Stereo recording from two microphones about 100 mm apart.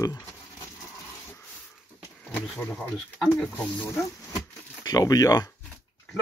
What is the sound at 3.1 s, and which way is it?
Speech, 5° right (ahead or behind).